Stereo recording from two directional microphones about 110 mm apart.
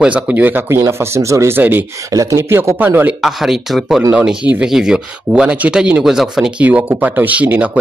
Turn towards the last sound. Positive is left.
turn(degrees=-15)  # may be behind; listen again after turning